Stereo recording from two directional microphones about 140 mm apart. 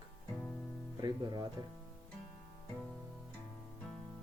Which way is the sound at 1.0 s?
30° right (ahead or behind).